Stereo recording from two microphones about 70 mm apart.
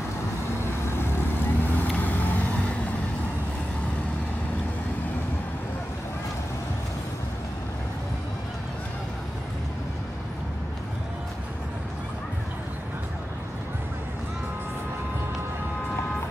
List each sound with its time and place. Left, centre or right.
0.8 s vehicle: left